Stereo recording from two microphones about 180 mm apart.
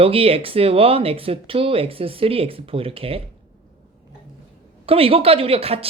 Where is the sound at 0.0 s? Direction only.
30° right (ahead or behind).